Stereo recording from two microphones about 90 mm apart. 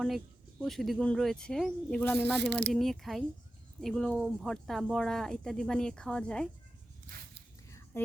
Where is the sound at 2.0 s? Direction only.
20° left (ahead or behind).